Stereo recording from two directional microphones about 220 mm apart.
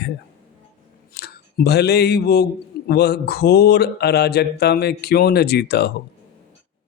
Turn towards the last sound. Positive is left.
turn(degrees=45)  # may be behind; listen again after turning